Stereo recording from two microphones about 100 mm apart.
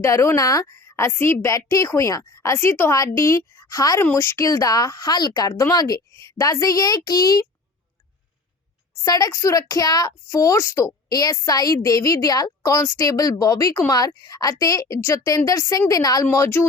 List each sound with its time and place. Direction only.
0.0 s a woman's voice: 25° left (ahead or behind)
4.0 s a woman's voice: 25° left (ahead or behind); by 7.4 s 40° left (ahead or behind)
9.0 s a woman's voice: 35° left (ahead or behind)
10.2 s a woman's voice: 30° left (ahead or behind)
16.3 s speech: 25° left (ahead or behind)